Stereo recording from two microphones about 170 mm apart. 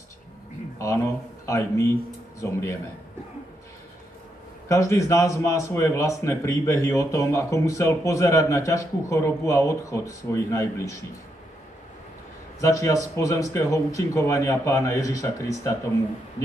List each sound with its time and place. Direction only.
0.7 s speech: 15° left (ahead or behind)
4.6 s speech: 15° left (ahead or behind)
12.5 s speech: 20° left (ahead or behind)